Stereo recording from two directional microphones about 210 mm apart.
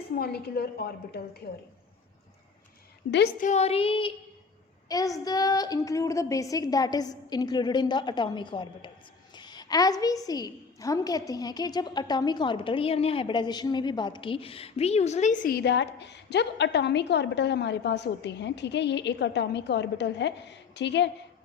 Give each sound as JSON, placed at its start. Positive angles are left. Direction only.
{"t": 0.2, "sound": "a woman's voice", "side_deg": 50}
{"t": 3.4, "sound": "a woman's voice", "side_deg": 30}